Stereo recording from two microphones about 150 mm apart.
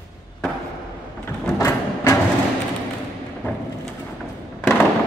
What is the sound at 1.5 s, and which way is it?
Music, 20° left (ahead or behind).